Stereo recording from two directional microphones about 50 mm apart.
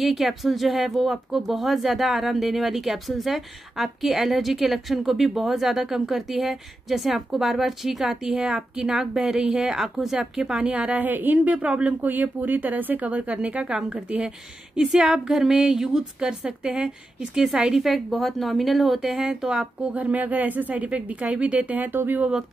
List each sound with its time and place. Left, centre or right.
0.0 s a woman's voice: centre
10.7 s speech: right
11.5 s speech: right
12.0 s a woman's voice: right; by 17.8 s centre
17.8 s speech: centre
19.1 s a woman's voice: centre
19.8 s speech: right